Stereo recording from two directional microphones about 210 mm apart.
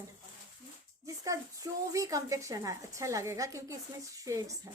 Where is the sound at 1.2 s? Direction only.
15° right (ahead or behind).